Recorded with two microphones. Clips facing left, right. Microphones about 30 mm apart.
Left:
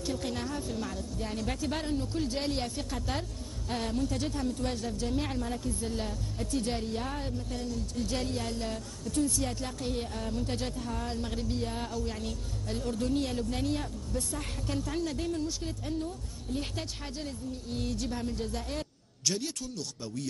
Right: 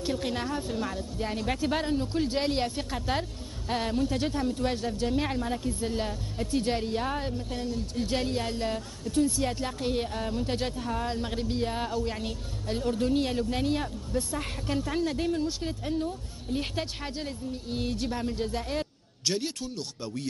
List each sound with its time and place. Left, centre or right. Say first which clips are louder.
0.0 s a woman's voice: right 4 dB; right